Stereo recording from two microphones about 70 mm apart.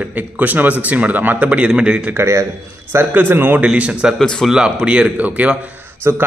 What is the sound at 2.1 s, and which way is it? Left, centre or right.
Speech, right.